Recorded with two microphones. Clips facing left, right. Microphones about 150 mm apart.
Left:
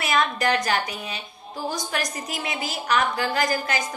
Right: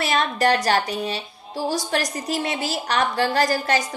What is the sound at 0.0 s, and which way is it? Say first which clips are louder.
A woman's voice: right 2 dB; 35° right (ahead or behind).